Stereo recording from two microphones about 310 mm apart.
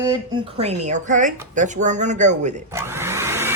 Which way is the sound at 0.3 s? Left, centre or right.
Centre.